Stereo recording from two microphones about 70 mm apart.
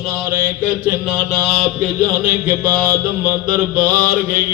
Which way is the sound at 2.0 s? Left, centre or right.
Right.